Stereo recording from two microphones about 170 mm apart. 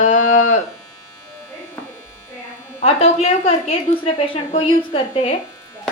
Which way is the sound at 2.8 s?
35° left (ahead or behind).